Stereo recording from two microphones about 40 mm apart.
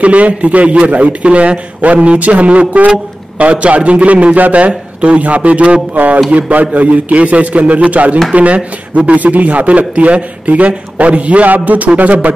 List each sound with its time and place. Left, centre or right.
0.0 s a man's voice: right